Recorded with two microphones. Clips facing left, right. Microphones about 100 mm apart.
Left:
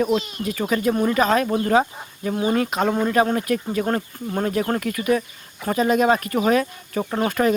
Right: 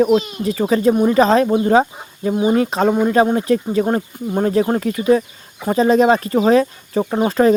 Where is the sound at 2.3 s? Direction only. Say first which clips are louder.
Right 5 dB; 20° right (ahead or behind).